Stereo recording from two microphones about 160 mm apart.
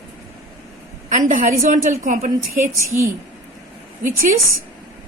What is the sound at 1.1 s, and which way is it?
A woman's voice, 55° right (ahead or behind).